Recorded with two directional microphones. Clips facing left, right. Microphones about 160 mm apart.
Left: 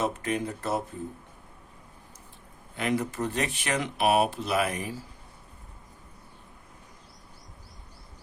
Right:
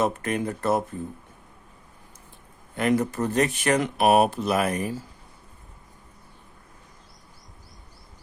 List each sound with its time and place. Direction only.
0.0 s speech: 55° right (ahead or behind)
2.7 s speech: 45° right (ahead or behind)